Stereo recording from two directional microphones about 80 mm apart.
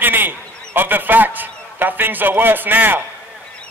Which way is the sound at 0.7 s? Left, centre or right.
Right.